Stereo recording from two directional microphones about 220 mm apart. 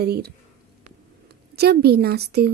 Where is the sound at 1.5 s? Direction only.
45° right (ahead or behind).